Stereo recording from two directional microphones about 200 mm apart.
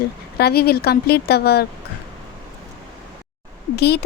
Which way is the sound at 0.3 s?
50° left (ahead or behind).